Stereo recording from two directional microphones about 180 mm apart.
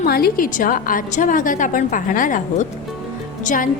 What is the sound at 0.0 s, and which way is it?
A woman's voice, 55° left (ahead or behind).